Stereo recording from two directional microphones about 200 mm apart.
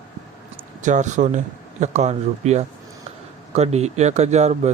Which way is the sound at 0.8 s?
40° right (ahead or behind).